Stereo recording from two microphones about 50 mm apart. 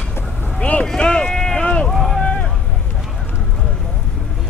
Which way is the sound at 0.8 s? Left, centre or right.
Centre.